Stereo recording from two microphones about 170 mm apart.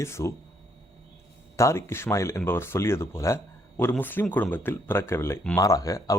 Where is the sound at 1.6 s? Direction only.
15° left (ahead or behind).